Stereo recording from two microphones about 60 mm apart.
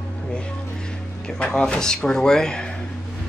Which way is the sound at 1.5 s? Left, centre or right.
Centre.